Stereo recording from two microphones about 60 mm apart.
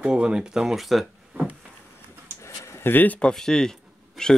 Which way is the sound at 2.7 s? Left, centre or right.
Left.